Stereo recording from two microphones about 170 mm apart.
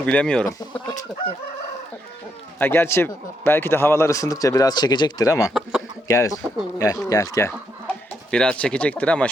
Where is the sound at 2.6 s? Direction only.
15° left (ahead or behind).